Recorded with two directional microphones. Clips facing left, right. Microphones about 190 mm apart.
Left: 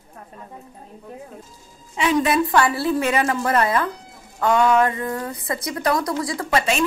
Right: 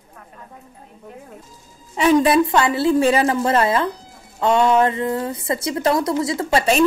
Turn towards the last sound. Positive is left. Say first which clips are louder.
# right 3 dB
turn(degrees=-25)  # may be behind; listen again after turning